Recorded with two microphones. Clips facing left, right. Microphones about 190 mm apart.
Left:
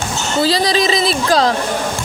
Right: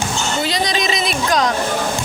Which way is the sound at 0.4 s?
35° left (ahead or behind).